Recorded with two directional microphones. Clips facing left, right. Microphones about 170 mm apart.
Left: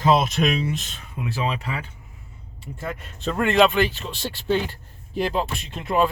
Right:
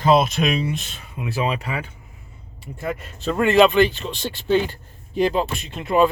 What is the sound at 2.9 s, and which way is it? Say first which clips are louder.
Speech: right 4 dB; 5° right (ahead or behind).